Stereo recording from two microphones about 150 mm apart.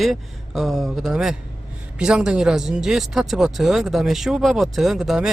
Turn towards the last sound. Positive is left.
turn(degrees=-5)  # may be behind; listen again after turning